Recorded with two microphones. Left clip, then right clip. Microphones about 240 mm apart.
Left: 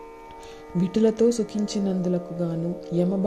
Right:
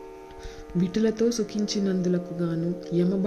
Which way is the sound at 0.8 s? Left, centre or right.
Centre.